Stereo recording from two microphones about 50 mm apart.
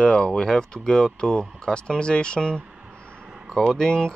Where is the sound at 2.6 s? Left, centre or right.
Right.